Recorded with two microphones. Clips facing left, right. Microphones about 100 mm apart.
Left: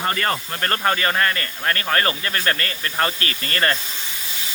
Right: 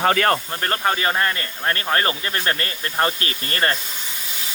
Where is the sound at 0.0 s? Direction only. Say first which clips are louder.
Right 5 dB; 65° right (ahead or behind).